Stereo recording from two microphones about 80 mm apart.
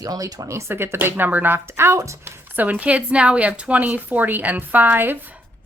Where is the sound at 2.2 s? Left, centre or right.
Right.